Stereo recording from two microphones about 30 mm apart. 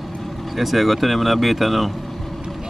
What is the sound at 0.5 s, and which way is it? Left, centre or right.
Speech, centre.